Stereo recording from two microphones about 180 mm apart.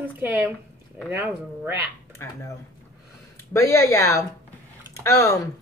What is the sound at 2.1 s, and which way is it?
Speech, 15° left (ahead or behind).